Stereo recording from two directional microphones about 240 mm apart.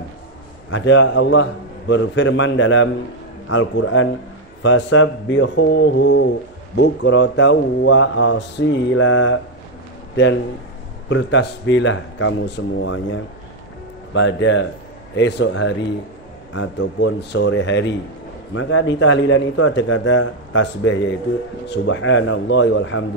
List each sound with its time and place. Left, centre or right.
0.7 s speech: left
11.1 s speech: left
14.1 s speech: left